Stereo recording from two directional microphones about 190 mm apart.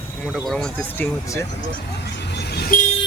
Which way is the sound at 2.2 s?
60° left (ahead or behind).